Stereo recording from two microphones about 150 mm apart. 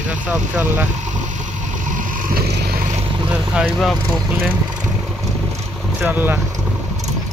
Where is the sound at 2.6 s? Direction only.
85° right.